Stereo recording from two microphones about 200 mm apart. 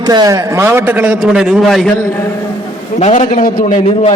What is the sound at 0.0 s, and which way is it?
A man's voice, 20° right (ahead or behind).